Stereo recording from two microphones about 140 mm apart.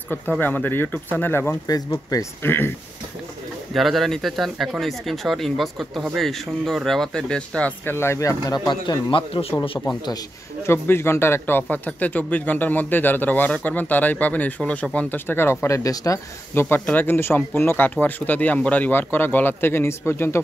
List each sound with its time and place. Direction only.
0.4 s speech: 15° left (ahead or behind)
1.7 s speech: 25° left (ahead or behind)
2.4 s speech: 15° left (ahead or behind)
3.7 s speech: centre (ahead or behind); by 9.5 s 40° left (ahead or behind)
10.7 s speech: 15° left (ahead or behind)